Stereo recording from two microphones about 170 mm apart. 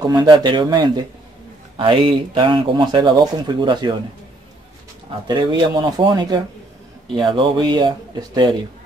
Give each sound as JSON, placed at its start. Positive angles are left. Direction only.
{"t": 0.0, "sound": "speech", "side_deg": -25}
{"t": 5.2, "sound": "speech", "side_deg": -25}